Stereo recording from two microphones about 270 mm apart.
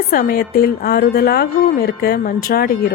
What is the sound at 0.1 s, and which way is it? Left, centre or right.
Speech, left.